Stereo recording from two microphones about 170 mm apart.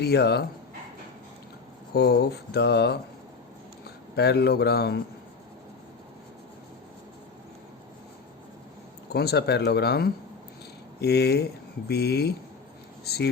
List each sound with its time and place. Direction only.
0.0 s speech: 70° left (ahead or behind)
1.9 s speech: 70° left (ahead or behind)
4.1 s speech: 75° left (ahead or behind)
9.1 s speech: 70° left (ahead or behind)